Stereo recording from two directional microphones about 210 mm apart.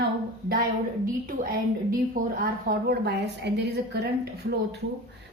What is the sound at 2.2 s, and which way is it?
A woman's voice, 45° right (ahead or behind).